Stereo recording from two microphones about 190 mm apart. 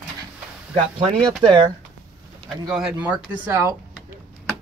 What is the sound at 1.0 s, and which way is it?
Speech, 30° right (ahead or behind).